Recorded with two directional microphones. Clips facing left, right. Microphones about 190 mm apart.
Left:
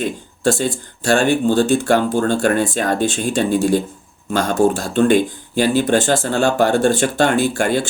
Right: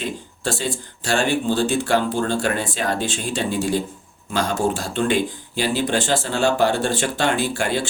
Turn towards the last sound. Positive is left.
turn(degrees=45)  # may be behind; listen again after turning